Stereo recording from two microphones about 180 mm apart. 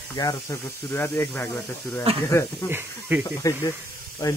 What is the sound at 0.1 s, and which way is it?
A man's voice, 25° left (ahead or behind).